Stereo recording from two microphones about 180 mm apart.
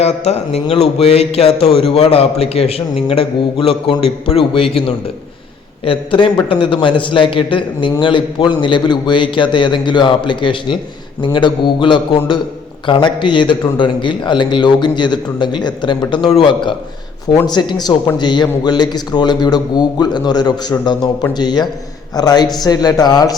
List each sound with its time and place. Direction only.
0.0 s a man's voice: 35° left (ahead or behind)
5.8 s a man's voice: 30° left (ahead or behind)